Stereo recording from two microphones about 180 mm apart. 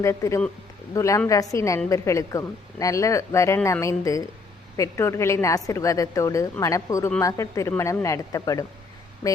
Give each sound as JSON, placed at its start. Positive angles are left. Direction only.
{"t": 0.0, "sound": "speech", "side_deg": 15}